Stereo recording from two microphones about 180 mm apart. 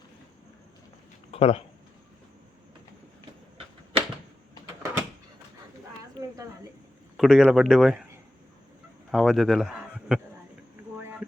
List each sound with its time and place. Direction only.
1.3 s speech: 35° left (ahead or behind)
4.6 s door: 15° right (ahead or behind)
7.2 s speech: 5° right (ahead or behind)
9.1 s speech: centre (ahead or behind)